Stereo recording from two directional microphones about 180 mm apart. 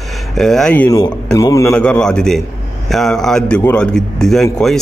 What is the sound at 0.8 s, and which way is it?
Speech, 20° left (ahead or behind).